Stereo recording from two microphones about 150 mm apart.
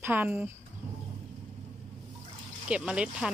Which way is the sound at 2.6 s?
5° right (ahead or behind).